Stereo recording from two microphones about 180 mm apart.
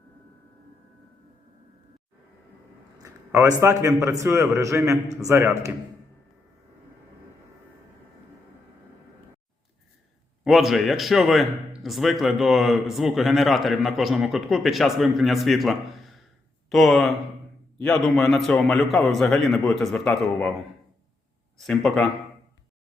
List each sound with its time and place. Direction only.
3.0 s a man's voice: 15° right (ahead or behind)
10.4 s a man's voice: centre (ahead or behind)
21.6 s a man's voice: centre (ahead or behind)